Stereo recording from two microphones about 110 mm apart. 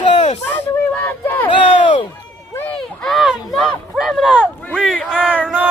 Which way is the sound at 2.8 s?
5° left (ahead or behind).